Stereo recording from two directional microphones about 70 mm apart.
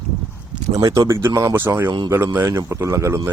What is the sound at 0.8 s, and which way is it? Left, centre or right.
Speech, right.